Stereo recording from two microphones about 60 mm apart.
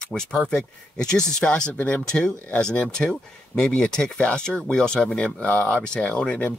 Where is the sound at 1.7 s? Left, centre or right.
Left.